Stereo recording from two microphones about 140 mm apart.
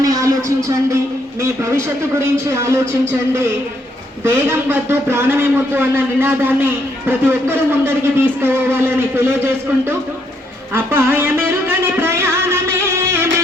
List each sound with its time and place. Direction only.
0.0 s a sound: 25° right (ahead or behind)
1.4 s a man's voice: 20° right (ahead or behind)
10.9 s a man's voice: 15° right (ahead or behind)
11.9 s music: 15° right (ahead or behind)